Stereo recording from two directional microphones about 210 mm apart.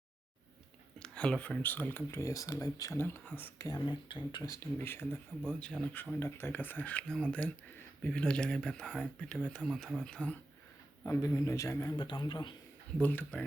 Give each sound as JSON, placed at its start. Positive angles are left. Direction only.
{"t": 0.9, "sound": "speech", "side_deg": 5}
{"t": 5.4, "sound": "speech", "side_deg": 0}
{"t": 11.0, "sound": "speech", "side_deg": 15}
{"t": 13.0, "sound": "speech", "side_deg": 10}